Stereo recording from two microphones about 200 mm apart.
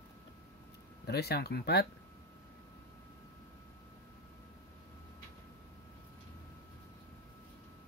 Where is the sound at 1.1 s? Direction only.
55° left (ahead or behind).